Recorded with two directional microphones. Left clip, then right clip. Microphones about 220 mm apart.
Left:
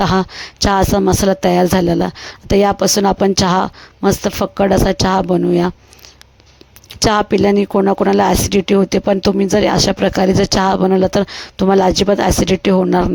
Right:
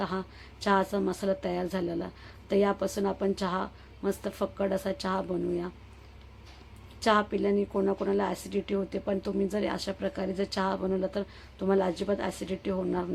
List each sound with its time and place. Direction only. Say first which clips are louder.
0.0 s speech: left 18 dB; 50° left (ahead or behind)
7.0 s speech: left 13 dB; 45° left (ahead or behind)